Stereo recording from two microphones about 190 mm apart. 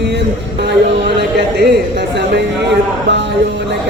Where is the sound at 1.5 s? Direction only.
60° right (ahead or behind).